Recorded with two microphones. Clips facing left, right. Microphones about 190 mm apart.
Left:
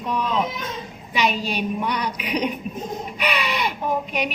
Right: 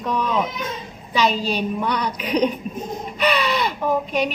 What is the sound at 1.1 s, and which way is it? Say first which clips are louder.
Speech: right 3 dB; 15° left (ahead or behind).